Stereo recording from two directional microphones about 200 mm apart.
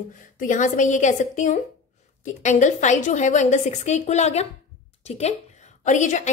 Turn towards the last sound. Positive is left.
turn(degrees=40)  # may be behind; listen again after turning